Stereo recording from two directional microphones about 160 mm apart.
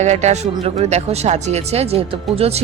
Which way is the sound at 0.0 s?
45° right (ahead or behind).